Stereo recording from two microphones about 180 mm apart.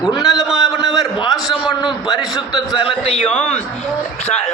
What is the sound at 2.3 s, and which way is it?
Speech, 25° left (ahead or behind).